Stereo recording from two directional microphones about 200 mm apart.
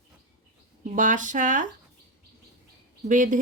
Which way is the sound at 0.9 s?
40° right (ahead or behind).